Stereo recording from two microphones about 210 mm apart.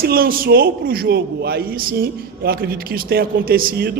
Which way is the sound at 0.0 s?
45° right (ahead or behind).